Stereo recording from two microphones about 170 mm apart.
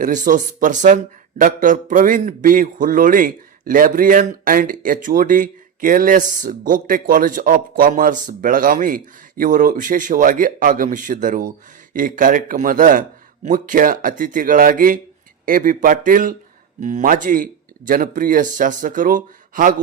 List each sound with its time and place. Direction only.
0.0 s a man's voice: 50° right (ahead or behind)